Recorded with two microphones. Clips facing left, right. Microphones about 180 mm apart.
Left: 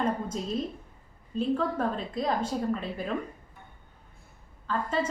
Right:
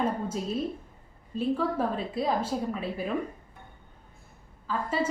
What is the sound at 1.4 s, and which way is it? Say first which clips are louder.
A woman's voice: even; 5° right (ahead or behind).